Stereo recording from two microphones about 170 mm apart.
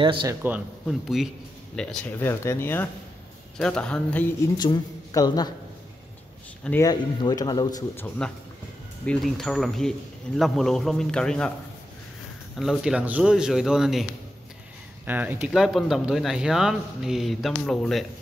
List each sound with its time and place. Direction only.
0.0 s speech: 30° right (ahead or behind)
0.3 s speech: 10° right (ahead or behind); by 4.3 s 10° left (ahead or behind)
4.6 s a man's voice: 25° left (ahead or behind)
6.8 s speech: 25° left (ahead or behind)
8.2 s speech: 5° left (ahead or behind)
12.5 s speech: centre (ahead or behind)
15.0 s speech: 10° right (ahead or behind)